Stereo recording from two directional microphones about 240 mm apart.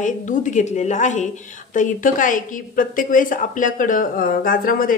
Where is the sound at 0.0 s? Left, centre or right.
Left.